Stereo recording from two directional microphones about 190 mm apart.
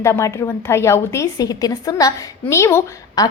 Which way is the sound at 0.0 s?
15° left (ahead or behind).